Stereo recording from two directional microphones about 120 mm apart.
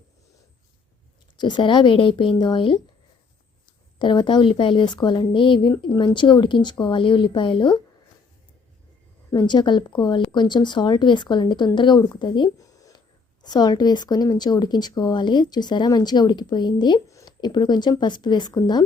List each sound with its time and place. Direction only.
1.4 s speech: 40° left (ahead or behind)
3.9 s speech: 40° left (ahead or behind)
9.3 s speech: 40° left (ahead or behind)